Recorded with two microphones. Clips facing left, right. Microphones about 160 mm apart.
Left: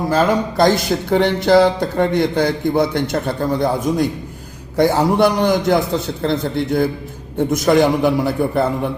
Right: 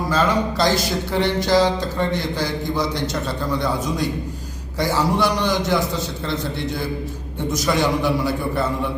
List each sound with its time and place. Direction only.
0.1 s a man's voice: 50° left (ahead or behind)